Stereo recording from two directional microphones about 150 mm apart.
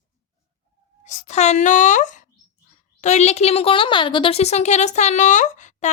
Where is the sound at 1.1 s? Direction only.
50° left (ahead or behind).